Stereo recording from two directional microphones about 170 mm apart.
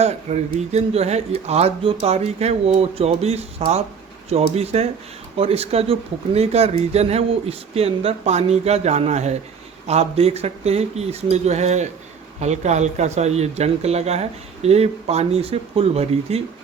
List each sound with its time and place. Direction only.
0.0 s speech: 40° right (ahead or behind)